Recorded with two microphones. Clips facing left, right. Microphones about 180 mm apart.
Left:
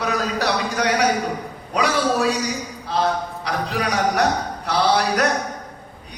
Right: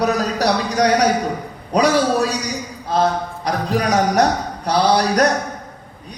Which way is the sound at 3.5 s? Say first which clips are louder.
Right 5 dB; 45° right (ahead or behind).